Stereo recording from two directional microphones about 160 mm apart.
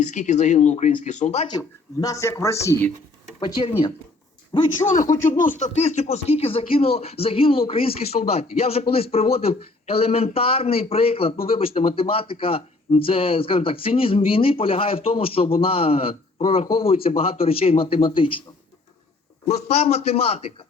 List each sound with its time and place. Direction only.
0.0 s speech: 50° left (ahead or behind)
1.5 s speech: 25° left (ahead or behind)
3.4 s speech: 30° left (ahead or behind)
5.4 s speech: 50° left (ahead or behind); by 18.4 s 30° left (ahead or behind)
19.5 s speech: 45° left (ahead or behind)